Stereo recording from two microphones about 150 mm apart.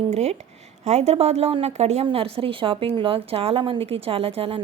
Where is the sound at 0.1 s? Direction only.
45° right (ahead or behind).